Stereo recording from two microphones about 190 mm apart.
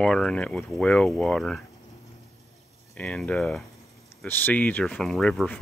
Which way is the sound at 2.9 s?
5° left (ahead or behind).